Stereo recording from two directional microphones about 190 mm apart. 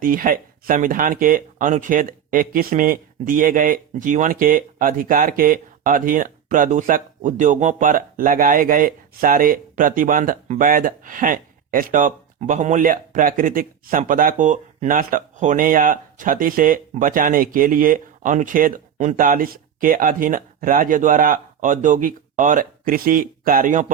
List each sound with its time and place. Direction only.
0.0 s speech: 45° right (ahead or behind)